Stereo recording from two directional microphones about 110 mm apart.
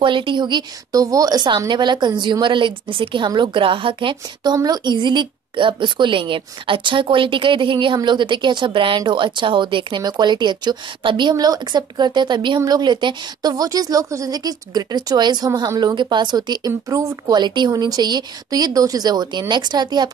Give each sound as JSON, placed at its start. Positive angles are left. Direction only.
{"t": 0.0, "sound": "a woman's voice", "side_deg": -50}
{"t": 17.3, "sound": "speech", "side_deg": -40}